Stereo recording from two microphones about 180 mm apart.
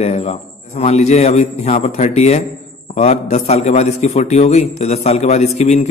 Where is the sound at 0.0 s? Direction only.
35° left (ahead or behind).